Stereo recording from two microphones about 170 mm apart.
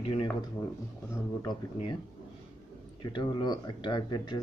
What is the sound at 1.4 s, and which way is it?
Speech, 25° left (ahead or behind).